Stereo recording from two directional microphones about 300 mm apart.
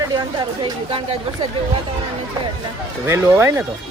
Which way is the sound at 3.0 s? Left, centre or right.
Centre.